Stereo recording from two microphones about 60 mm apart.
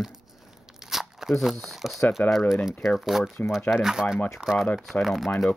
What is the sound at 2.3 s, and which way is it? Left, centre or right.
Speech, centre.